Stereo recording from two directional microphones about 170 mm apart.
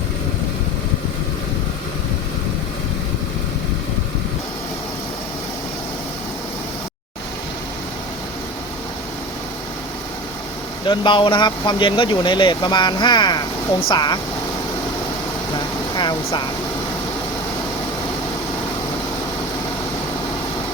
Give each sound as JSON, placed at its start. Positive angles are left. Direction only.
{"t": 10.8, "sound": "speech", "side_deg": 30}
{"t": 15.5, "sound": "vehicle", "side_deg": 25}